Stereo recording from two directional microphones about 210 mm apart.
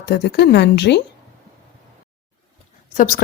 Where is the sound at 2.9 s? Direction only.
45° left (ahead or behind).